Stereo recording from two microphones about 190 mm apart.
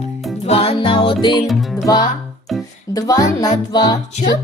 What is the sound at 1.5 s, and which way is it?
Music, centre (ahead or behind).